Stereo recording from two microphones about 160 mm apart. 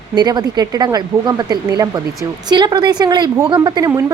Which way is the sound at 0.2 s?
25° right (ahead or behind).